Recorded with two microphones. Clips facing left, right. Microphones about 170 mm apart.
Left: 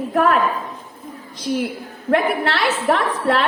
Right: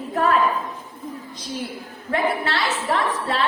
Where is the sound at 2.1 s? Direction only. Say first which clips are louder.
Left 4 dB; 60° left (ahead or behind).